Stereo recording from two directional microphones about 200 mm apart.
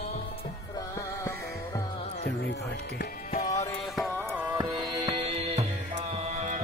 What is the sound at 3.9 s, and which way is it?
Music, centre (ahead or behind).